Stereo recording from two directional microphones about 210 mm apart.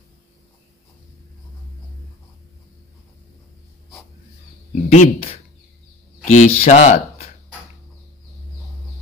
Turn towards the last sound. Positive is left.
turn(degrees=35)  # may be behind; listen again after turning